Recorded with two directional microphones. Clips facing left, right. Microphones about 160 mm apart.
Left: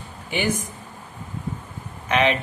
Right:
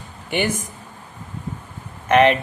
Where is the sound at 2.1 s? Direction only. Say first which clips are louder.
Right 6 dB; 55° right (ahead or behind).